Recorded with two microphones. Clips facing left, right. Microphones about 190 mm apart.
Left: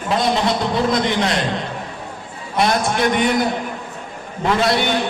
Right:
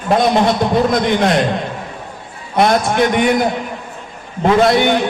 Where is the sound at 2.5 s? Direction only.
55° right (ahead or behind).